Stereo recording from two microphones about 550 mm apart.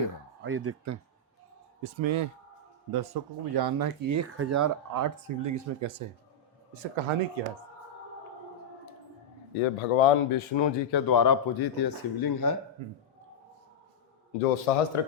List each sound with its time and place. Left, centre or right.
0.4 s speech: right
1.8 s speech: right
2.9 s speech: right
4.2 s speech: right
6.7 s a man's voice: right
7.4 s speech: right
9.6 s speech: left
11.1 s speech: left
14.7 s speech: left